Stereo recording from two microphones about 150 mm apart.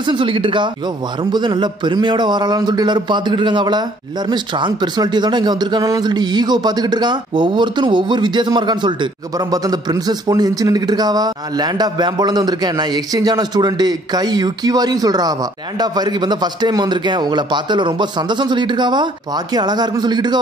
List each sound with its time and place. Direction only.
0.0 s speech: 35° right (ahead or behind)